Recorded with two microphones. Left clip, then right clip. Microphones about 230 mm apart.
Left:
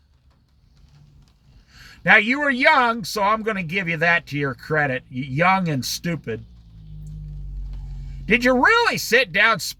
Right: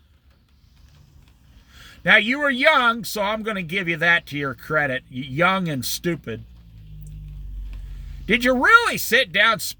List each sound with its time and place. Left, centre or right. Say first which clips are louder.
2.0 s speech: left 1 dB; centre
8.3 s speech: right 1 dB; centre